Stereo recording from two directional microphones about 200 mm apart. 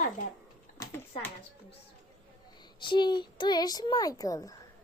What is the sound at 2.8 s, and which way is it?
A child's voice, 25° left (ahead or behind).